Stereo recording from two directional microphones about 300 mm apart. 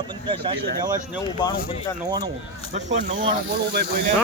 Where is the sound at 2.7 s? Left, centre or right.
Right.